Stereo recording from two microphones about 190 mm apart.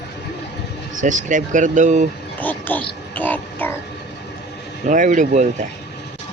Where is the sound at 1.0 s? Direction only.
40° right (ahead or behind).